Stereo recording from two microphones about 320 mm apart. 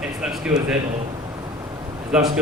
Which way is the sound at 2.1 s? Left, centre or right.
Centre.